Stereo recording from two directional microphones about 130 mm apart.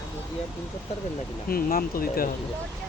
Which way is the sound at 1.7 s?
90° left.